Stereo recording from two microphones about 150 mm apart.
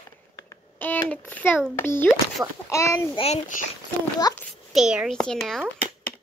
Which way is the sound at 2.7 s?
20° left (ahead or behind).